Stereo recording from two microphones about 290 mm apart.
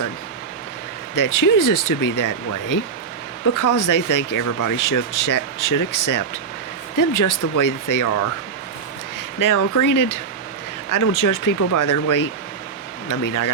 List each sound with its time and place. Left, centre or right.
1.1 s speech: left
9.4 s speech: left